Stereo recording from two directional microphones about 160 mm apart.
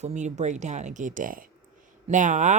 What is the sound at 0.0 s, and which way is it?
Speech, 45° right (ahead or behind).